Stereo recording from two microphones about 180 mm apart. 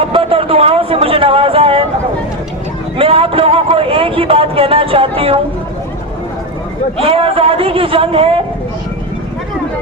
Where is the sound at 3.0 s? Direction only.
30° right (ahead or behind).